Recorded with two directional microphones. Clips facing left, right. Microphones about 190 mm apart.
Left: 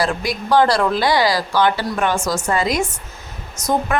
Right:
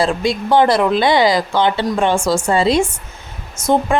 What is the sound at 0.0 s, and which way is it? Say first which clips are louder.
Speech: right 4 dB; 25° right (ahead or behind).